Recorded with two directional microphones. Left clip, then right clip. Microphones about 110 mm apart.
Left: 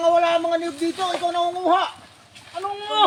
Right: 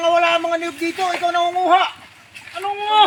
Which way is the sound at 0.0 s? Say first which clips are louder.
Right 2 dB; 15° left (ahead or behind).